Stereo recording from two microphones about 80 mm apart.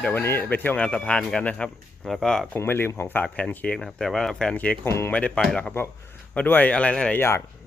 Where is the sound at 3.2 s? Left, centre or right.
Centre.